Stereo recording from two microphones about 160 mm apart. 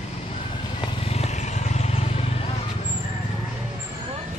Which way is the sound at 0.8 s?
35° left (ahead or behind).